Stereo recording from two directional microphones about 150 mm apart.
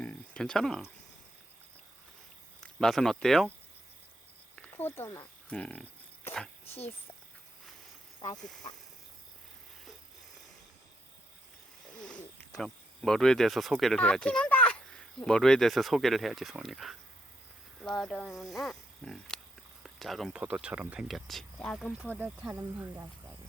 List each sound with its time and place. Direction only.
0.0 s a sound: 10° left (ahead or behind)
2.6 s speech: 5° left (ahead or behind)
4.5 s speech: 10° left (ahead or behind)
11.9 s speech: 5° left (ahead or behind)
22.1 s speech: 10° right (ahead or behind)
22.5 s speech: 20° right (ahead or behind)